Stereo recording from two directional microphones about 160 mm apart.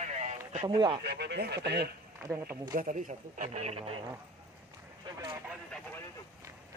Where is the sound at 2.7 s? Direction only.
55° right (ahead or behind); by 3.9 s 40° right (ahead or behind).